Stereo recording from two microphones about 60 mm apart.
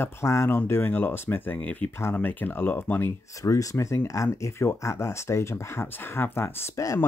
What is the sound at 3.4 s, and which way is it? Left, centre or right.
Speech, left.